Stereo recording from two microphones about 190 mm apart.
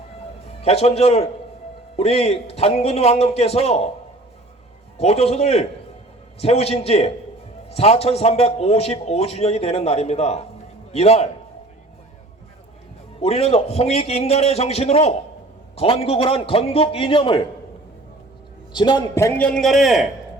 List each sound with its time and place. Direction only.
0.6 s a man's voice: 35° left (ahead or behind)
4.9 s a man's voice: 35° left (ahead or behind)
13.1 s a man's voice: 30° left (ahead or behind)
18.7 s a man's voice: 25° left (ahead or behind); by 20.1 s centre (ahead or behind)